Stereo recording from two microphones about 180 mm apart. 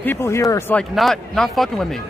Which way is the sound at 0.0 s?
15° left (ahead or behind).